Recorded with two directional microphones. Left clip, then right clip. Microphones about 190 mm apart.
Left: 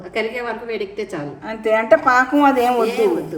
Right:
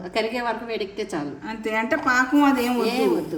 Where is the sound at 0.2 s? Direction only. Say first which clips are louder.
Left 2 dB; 45° right (ahead or behind).